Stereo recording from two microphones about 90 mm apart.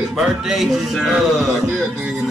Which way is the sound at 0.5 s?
Centre (ahead or behind).